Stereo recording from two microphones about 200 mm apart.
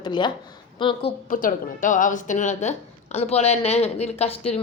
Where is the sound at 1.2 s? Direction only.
40° left (ahead or behind).